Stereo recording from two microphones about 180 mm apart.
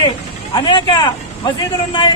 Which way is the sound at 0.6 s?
25° left (ahead or behind).